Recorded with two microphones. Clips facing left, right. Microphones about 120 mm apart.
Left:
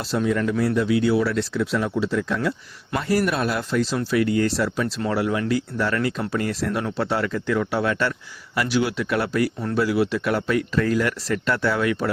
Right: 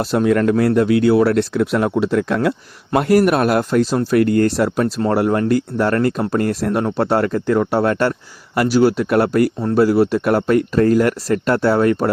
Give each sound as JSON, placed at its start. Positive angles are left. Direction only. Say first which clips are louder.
{"t": 0.0, "sound": "speech", "louder": "right 7 dB", "side_deg": -55}